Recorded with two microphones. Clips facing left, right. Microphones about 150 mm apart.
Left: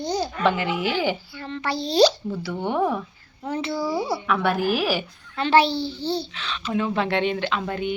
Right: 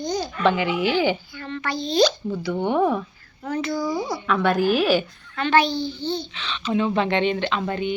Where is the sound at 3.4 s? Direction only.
30° left (ahead or behind).